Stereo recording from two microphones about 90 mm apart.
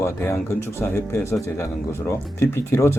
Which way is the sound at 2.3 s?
30° left (ahead or behind).